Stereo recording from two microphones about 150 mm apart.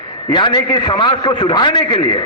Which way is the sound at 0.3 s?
30° left (ahead or behind).